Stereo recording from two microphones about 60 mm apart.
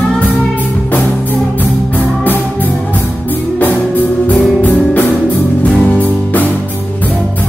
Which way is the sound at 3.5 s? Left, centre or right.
Left.